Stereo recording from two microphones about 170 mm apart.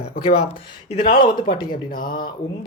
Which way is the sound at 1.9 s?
55° left (ahead or behind).